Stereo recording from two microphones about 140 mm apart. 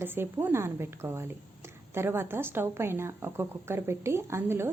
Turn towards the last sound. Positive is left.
turn(degrees=-15)  # may be behind; listen again after turning